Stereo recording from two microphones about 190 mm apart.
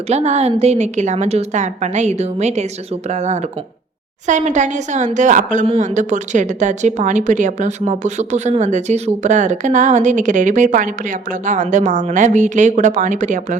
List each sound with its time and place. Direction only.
0.1 s a woman's voice: 35° right (ahead or behind)